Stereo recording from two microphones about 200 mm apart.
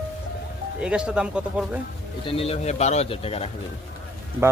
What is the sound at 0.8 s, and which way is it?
Speech, 5° right (ahead or behind).